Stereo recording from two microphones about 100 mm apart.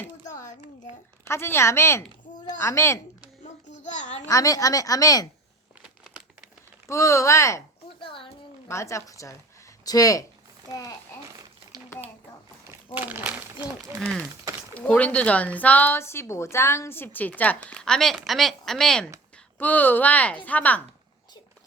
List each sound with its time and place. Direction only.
1.3 s speech: 25° left (ahead or behind)
4.3 s a woman's voice: 35° left (ahead or behind)
6.8 s a woman's voice: 30° left (ahead or behind)
8.0 s a sound: 60° left (ahead or behind)
8.6 s a woman's voice: 30° left (ahead or behind)
11.9 s a sound: 30° left (ahead or behind)
12.9 s speech: 15° right (ahead or behind)
14.7 s speech: 15° left (ahead or behind)
19.5 s speech: 15° left (ahead or behind)